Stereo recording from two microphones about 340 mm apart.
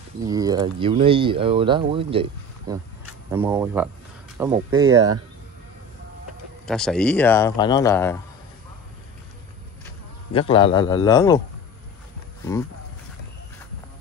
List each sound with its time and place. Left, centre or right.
0.2 s speech: centre
6.6 s speech: centre
9.8 s speech: centre